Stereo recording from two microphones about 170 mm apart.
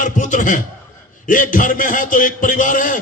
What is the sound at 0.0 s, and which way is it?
A man's voice, 50° left (ahead or behind).